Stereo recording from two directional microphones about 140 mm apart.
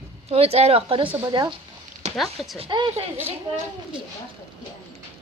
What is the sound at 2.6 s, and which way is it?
Speech, 35° right (ahead or behind).